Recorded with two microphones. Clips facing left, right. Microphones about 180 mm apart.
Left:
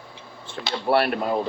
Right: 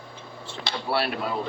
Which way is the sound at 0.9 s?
55° left (ahead or behind).